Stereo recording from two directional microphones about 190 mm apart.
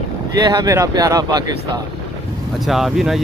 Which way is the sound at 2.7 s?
Centre (ahead or behind).